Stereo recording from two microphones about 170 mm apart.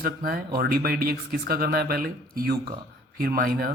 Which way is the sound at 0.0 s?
60° right (ahead or behind).